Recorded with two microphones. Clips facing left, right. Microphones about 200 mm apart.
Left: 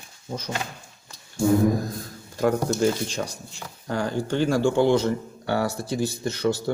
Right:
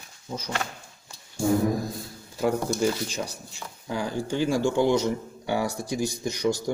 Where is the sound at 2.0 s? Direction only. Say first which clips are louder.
Left 4 dB; 5° right (ahead or behind).